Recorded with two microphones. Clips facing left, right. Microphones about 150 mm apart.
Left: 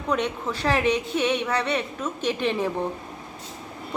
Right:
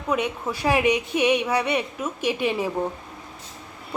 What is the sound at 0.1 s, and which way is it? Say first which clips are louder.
A woman's voice: right 1 dB; 10° right (ahead or behind).